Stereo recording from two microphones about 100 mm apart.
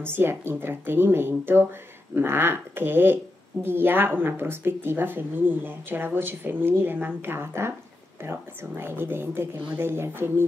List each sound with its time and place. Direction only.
0.0 s speech: 20° right (ahead or behind)